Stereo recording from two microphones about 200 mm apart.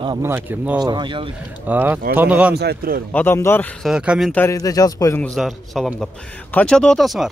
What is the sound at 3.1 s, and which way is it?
Speech, 10° left (ahead or behind).